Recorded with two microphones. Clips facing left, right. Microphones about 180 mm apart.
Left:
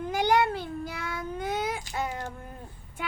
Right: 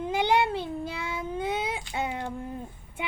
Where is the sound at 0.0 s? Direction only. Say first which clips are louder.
Even; 25° right (ahead or behind).